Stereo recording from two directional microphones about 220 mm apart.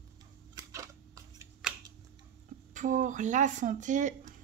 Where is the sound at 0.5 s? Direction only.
15° right (ahead or behind).